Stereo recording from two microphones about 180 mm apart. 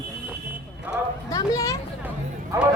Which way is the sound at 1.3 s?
20° left (ahead or behind).